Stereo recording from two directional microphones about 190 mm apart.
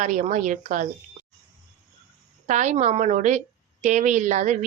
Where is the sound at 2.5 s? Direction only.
40° right (ahead or behind).